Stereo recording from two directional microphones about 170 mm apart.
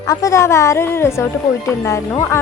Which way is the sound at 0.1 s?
20° left (ahead or behind).